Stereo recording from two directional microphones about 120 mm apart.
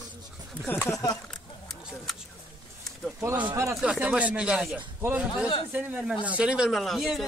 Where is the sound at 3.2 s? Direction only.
20° right (ahead or behind).